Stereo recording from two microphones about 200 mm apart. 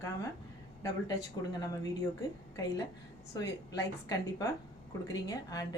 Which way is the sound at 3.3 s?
15° left (ahead or behind).